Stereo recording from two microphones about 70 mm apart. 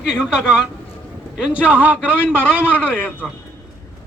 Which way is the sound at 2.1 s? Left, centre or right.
Left.